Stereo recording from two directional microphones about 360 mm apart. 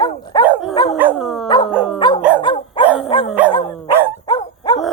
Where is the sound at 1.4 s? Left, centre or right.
Centre.